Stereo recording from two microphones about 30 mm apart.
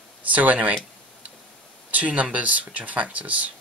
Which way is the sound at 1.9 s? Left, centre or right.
Right.